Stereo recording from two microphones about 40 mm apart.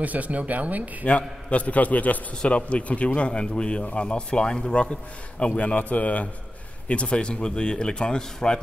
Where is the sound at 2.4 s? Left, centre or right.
Left.